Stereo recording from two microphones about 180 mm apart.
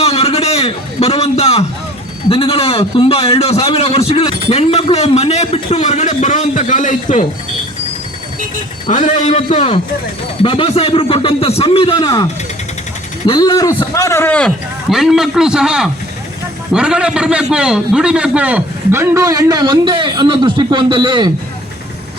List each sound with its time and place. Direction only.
0.0 s a sound: 35° left (ahead or behind)
2.3 s a man's voice: 30° left (ahead or behind)
8.9 s a man's voice: 45° left (ahead or behind); by 21.2 s 25° right (ahead or behind)